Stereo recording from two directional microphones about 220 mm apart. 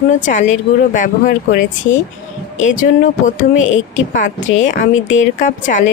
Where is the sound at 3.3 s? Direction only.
35° left (ahead or behind).